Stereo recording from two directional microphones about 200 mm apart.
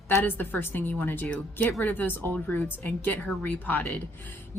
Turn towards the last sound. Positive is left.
turn(degrees=5)  # may be behind; listen again after turning